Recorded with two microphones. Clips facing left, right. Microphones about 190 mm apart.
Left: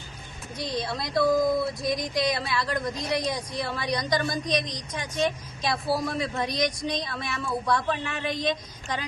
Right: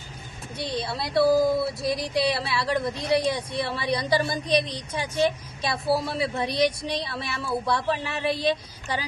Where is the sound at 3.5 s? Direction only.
Centre (ahead or behind).